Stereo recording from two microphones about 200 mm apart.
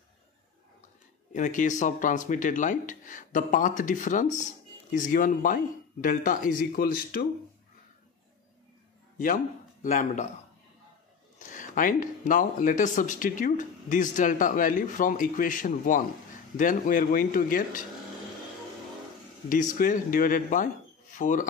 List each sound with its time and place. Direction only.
1.3 s speech: 40° left (ahead or behind)
9.2 s speech: 40° left (ahead or behind)
11.3 s speech: 40° left (ahead or behind)
19.5 s speech: 40° left (ahead or behind)